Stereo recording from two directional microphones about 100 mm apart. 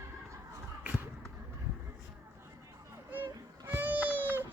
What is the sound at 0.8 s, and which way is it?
Basketball bounce, 20° right (ahead or behind).